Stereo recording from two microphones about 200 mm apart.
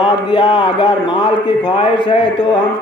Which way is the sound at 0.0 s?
25° left (ahead or behind).